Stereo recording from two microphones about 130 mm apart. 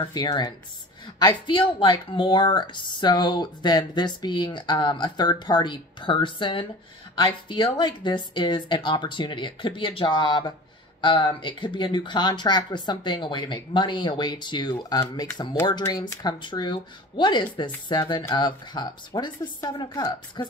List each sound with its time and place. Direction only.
0.0 s a woman's voice: 35° left (ahead or behind)